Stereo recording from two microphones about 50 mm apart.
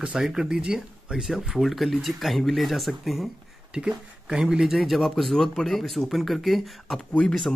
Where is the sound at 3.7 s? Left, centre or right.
Centre.